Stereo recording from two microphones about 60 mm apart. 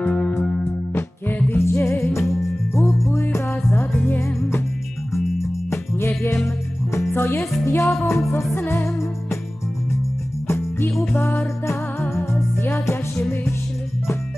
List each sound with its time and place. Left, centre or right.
0.0 s music: left
0.9 s music: left
5.7 s music: left
10.9 s music: centre
11.1 s music: left
13.3 s music: left